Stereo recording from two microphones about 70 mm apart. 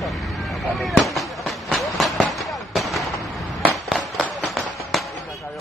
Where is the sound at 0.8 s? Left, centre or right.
Centre.